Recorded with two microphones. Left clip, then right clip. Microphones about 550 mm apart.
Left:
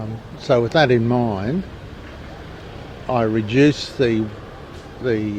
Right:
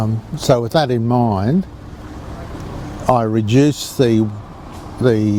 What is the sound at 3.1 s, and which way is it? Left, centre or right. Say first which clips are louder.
Speech: right 5 dB; right.